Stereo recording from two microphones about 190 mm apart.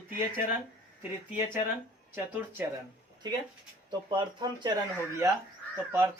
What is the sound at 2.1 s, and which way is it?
Speech, 10° right (ahead or behind).